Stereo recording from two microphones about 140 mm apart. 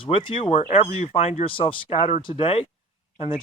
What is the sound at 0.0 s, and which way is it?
Speech, 35° left (ahead or behind).